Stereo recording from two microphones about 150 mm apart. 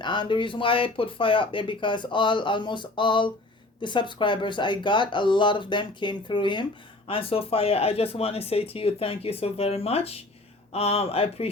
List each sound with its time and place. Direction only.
0.0 s speech: 30° left (ahead or behind)